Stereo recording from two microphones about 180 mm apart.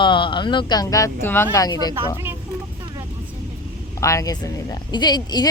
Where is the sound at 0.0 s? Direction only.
25° left (ahead or behind).